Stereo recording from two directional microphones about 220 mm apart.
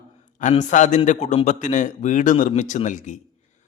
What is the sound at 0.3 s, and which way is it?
A man's voice, 35° left (ahead or behind).